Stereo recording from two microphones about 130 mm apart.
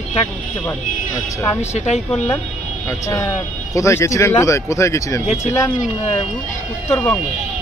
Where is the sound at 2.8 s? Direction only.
25° left (ahead or behind).